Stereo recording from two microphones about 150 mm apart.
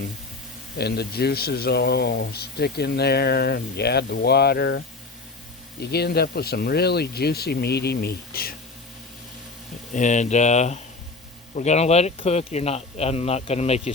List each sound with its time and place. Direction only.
0.8 s speech: 90° left
5.8 s speech: 90° left
9.9 s speech: 55° left (ahead or behind)